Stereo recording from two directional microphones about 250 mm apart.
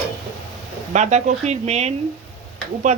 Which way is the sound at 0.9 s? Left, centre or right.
Right.